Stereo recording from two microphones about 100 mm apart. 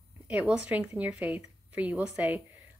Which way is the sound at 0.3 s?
10° right (ahead or behind).